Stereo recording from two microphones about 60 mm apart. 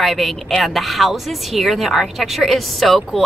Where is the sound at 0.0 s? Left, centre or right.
Centre.